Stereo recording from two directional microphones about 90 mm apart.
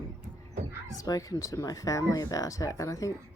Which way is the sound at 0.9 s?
40° left (ahead or behind).